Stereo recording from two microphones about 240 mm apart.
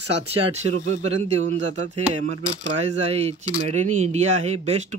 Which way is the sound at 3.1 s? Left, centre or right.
Right.